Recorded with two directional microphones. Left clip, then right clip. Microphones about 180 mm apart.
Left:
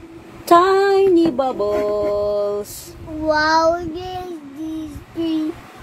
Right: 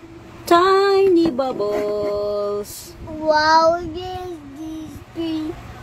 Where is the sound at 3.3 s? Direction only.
20° right (ahead or behind).